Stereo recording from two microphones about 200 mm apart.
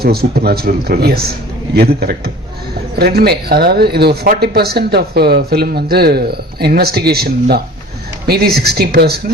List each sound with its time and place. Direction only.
0.0 s speech: 50° right (ahead or behind)